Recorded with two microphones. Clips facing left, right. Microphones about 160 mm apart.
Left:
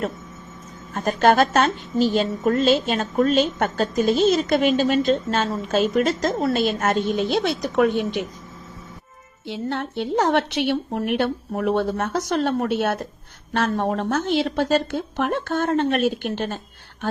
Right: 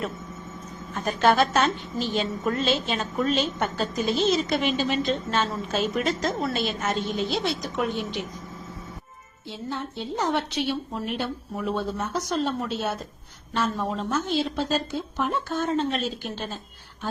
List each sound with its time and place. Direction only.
0.9 s a woman's voice: 45° left (ahead or behind)
9.5 s a woman's voice: 75° left (ahead or behind)